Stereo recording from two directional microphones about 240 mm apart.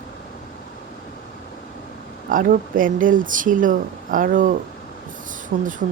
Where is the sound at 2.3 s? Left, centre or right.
Right.